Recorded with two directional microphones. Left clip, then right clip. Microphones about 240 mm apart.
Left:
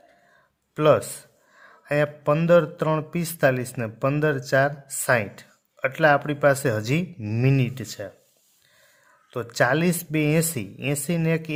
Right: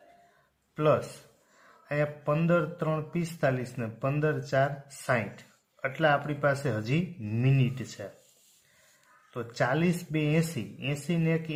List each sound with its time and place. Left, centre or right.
0.8 s speech: left
9.3 s speech: left